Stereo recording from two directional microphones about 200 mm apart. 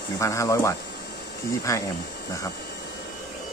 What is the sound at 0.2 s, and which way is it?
Speech, 15° left (ahead or behind).